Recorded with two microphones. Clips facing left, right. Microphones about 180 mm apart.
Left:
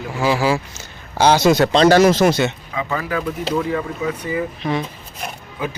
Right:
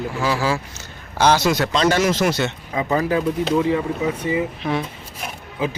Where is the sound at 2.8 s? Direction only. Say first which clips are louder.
Right 4 dB; 25° right (ahead or behind).